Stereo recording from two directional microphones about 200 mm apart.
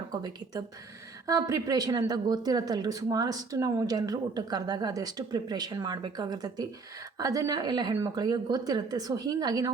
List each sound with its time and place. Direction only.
0.1 s speech: 20° right (ahead or behind)